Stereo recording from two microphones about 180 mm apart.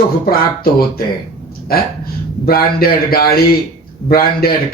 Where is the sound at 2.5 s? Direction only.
55° left (ahead or behind).